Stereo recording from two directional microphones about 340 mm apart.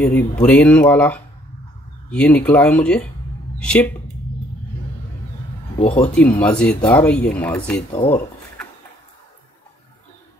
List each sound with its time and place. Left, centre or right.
0.0 s a woman's voice: centre
5.8 s speech: centre
6.4 s speech: centre
7.9 s speech: centre